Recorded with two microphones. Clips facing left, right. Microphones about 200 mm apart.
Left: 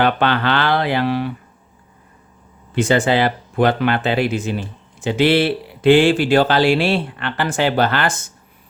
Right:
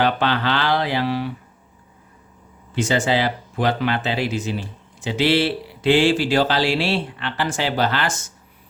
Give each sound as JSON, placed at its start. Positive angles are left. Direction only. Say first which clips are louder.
{"t": 0.0, "sound": "speech", "louder": "left 3 dB", "side_deg": 60}
{"t": 2.7, "sound": "speech", "louder": "left 4 dB", "side_deg": 55}